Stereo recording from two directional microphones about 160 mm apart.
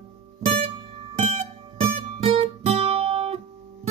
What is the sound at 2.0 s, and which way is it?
Music, 40° right (ahead or behind).